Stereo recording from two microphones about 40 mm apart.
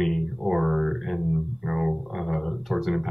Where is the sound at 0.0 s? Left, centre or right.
Centre.